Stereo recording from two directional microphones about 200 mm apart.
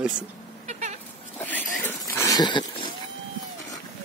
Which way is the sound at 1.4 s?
10° left (ahead or behind).